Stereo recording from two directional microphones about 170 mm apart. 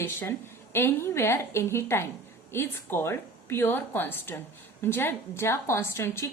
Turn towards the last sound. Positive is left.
turn(degrees=15)  # may be behind; listen again after turning